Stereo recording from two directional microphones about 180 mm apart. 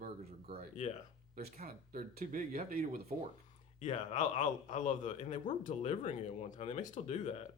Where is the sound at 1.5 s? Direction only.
50° right (ahead or behind).